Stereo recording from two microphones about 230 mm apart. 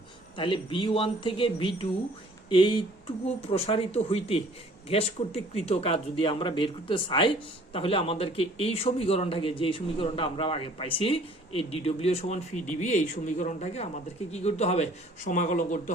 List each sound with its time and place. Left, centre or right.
0.3 s speech: left